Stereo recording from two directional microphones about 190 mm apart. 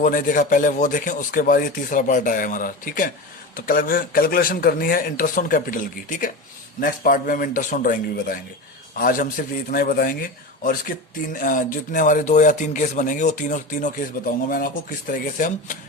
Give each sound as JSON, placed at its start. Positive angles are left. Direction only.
{"t": 0.0, "sound": "speech", "side_deg": 45}